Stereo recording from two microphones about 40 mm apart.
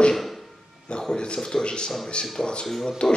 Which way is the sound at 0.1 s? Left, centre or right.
Centre.